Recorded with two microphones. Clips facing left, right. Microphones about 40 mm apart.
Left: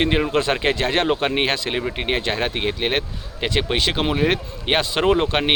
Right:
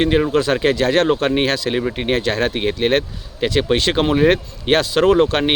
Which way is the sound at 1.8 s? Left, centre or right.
Centre.